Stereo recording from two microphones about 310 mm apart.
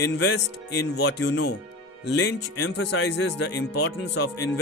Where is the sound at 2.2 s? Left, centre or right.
Left.